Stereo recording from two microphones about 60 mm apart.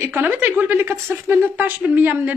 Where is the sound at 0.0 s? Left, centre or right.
Right.